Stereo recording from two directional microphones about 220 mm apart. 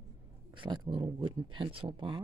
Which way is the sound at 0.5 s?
20° right (ahead or behind).